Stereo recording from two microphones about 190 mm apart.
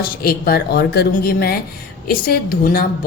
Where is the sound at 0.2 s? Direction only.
55° left (ahead or behind).